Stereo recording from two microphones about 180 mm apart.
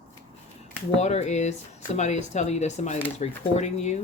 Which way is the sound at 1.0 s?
40° left (ahead or behind).